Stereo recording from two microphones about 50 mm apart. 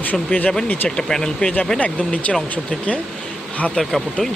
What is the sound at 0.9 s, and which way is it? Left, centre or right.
Speech, centre.